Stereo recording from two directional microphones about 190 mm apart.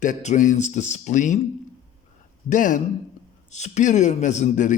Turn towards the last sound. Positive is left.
turn(degrees=40)  # may be behind; listen again after turning